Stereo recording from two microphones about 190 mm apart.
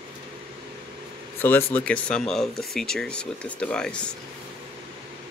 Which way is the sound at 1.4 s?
10° left (ahead or behind).